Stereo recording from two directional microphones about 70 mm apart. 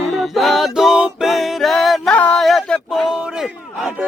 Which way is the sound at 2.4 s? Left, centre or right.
Centre.